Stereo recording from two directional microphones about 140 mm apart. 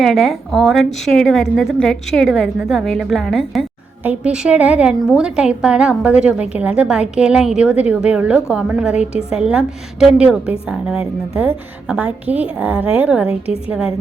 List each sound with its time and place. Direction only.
0.0 s a woman's voice: centre (ahead or behind)